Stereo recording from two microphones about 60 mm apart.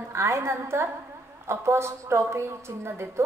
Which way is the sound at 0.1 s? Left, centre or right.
Right.